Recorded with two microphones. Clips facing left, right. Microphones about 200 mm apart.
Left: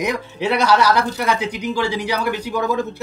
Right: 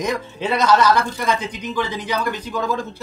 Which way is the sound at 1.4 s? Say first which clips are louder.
Left 4 dB; 70° left (ahead or behind).